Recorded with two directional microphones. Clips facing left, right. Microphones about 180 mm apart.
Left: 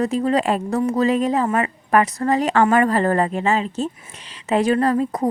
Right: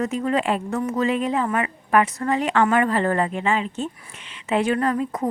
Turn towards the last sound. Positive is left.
turn(degrees=35)  # may be behind; listen again after turning